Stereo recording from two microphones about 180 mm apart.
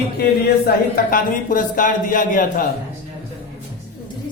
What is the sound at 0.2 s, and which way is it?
Speech, 60° left (ahead or behind).